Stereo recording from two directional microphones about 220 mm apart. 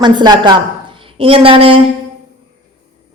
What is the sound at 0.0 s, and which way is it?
A man's voice, 20° right (ahead or behind).